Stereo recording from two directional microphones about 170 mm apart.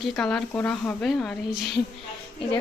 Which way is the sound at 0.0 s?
5° left (ahead or behind).